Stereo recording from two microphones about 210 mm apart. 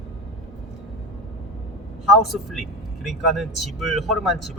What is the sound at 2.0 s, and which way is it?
A man's voice, centre (ahead or behind).